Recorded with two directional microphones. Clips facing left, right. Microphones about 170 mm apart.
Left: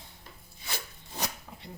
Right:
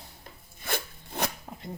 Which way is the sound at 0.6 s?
55° right (ahead or behind).